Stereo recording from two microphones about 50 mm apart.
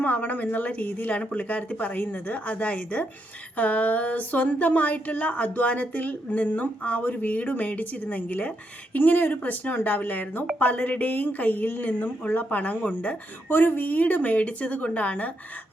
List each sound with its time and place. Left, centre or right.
0.0 s speech: left
13.5 s speech: left